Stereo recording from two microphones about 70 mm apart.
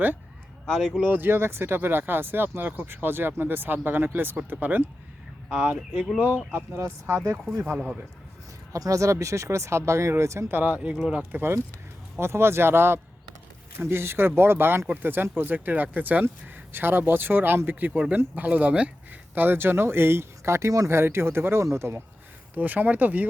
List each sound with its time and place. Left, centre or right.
0.7 s speech: centre
1.0 s speech: right
5.5 s speech: centre
6.1 s speech: right
6.7 s speech: right
8.7 s speech: right
10.5 s speech: right
22.5 s speech: right